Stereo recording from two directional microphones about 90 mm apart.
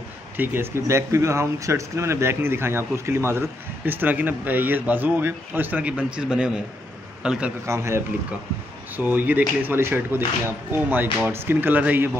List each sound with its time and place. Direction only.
0.4 s a man's voice: 30° right (ahead or behind); by 7.5 s 10° right (ahead or behind)
7.6 s a man's voice: 30° right (ahead or behind)
8.9 s speech: 20° right (ahead or behind)